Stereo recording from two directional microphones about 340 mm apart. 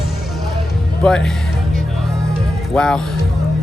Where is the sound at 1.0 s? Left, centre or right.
Centre.